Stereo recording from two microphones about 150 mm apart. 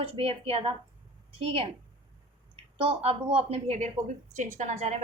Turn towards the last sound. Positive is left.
turn(degrees=-50)  # may be behind; listen again after turning